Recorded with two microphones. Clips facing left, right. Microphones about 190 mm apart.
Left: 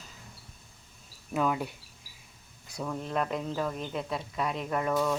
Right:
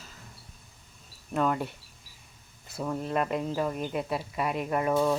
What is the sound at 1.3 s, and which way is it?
Speech, 5° left (ahead or behind).